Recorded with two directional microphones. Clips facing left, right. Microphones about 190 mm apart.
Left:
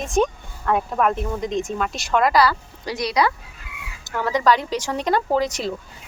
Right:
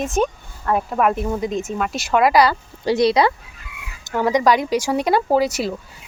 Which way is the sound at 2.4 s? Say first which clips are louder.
Right 3 dB; 25° right (ahead or behind).